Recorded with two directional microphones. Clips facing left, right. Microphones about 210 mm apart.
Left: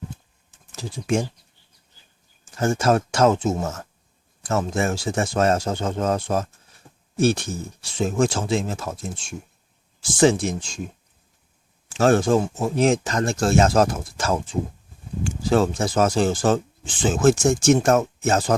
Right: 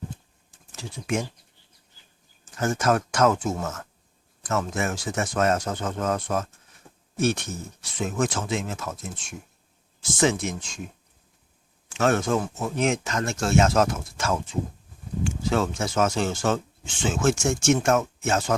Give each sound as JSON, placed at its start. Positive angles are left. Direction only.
{"t": 0.7, "sound": "speech", "side_deg": 35}
{"t": 2.4, "sound": "speech", "side_deg": 30}
{"t": 11.9, "sound": "speech", "side_deg": 35}